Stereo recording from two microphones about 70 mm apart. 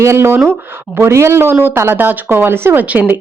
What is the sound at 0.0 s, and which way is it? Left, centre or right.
Speech, right.